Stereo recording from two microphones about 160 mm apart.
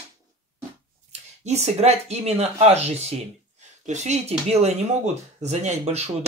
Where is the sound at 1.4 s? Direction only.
45° right (ahead or behind).